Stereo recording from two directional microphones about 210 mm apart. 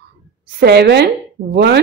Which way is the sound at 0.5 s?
50° right (ahead or behind).